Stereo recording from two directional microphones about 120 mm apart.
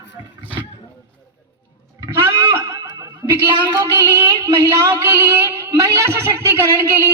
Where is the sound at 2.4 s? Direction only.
20° right (ahead or behind).